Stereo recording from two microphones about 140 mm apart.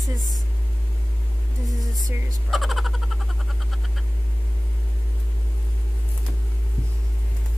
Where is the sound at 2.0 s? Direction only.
25° right (ahead or behind).